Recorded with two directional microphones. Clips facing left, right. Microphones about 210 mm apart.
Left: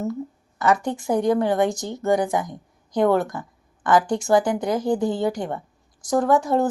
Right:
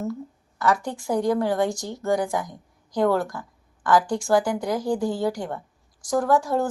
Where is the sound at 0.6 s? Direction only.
20° left (ahead or behind).